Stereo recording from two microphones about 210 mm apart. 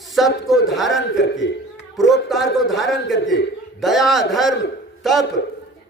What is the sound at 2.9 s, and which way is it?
Speech, 60° left (ahead or behind).